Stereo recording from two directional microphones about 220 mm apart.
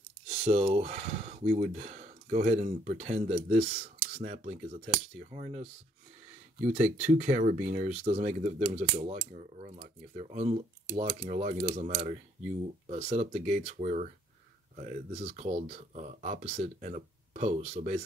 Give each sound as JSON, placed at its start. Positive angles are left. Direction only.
{"t": 0.3, "sound": "speech", "side_deg": -30}